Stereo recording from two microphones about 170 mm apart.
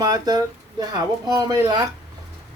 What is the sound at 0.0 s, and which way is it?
A child's voice, 25° right (ahead or behind).